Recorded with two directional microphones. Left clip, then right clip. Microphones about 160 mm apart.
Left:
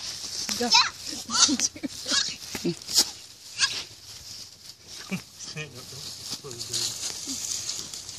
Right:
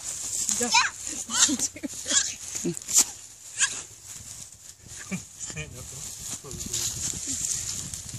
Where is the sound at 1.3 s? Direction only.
5° right (ahead or behind).